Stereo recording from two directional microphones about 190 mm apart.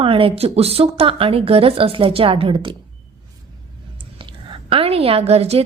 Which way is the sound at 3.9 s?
25° right (ahead or behind).